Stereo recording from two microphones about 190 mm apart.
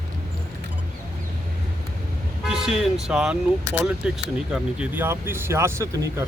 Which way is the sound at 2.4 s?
5° right (ahead or behind).